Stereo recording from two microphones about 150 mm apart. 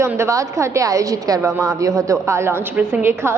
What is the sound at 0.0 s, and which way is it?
A woman's voice, 20° right (ahead or behind).